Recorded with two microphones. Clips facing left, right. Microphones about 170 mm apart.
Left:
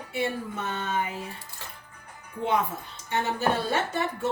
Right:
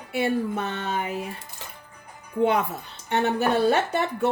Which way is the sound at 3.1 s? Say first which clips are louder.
Right 4 dB; 65° right (ahead or behind).